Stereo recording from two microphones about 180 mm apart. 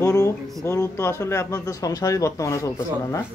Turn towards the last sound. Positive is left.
turn(degrees=20)  # may be behind; listen again after turning